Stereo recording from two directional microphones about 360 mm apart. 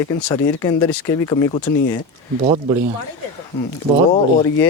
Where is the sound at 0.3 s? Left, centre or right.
Centre.